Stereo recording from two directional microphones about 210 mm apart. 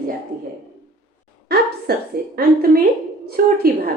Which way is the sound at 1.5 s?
50° right (ahead or behind).